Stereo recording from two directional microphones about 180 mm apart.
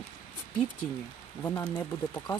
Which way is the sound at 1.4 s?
15° left (ahead or behind).